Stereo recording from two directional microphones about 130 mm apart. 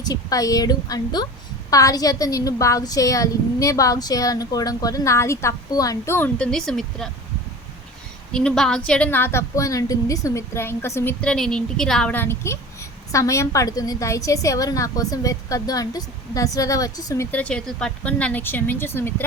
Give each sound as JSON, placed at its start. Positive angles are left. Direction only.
{"t": 0.0, "sound": "a woman's voice", "side_deg": 30}
{"t": 6.4, "sound": "speech", "side_deg": 5}
{"t": 8.3, "sound": "a woman's voice", "side_deg": 5}
{"t": 11.2, "sound": "a woman's voice", "side_deg": 5}
{"t": 17.3, "sound": "a woman's voice", "side_deg": 10}